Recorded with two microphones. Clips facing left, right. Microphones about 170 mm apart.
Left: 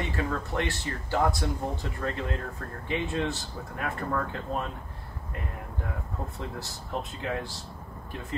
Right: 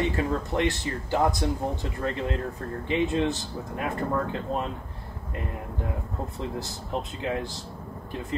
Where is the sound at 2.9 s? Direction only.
25° right (ahead or behind).